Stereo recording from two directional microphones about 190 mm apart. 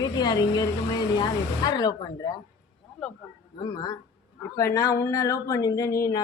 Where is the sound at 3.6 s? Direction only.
20° left (ahead or behind).